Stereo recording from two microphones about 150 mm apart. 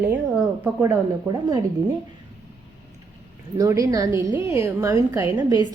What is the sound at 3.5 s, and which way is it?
A woman's voice, 20° right (ahead or behind).